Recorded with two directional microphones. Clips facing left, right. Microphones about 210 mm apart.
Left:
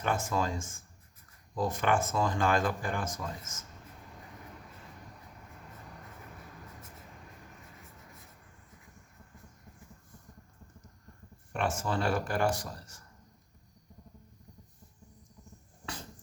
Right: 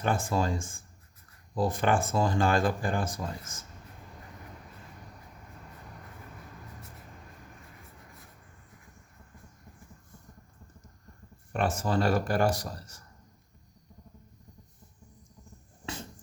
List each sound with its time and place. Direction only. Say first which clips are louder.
0.0 s speech: right 3 dB; 30° right (ahead or behind)
11.5 s speech: right 4 dB; 40° right (ahead or behind)